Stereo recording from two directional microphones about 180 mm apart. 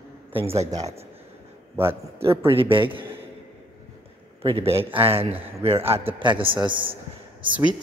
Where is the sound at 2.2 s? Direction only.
15° right (ahead or behind).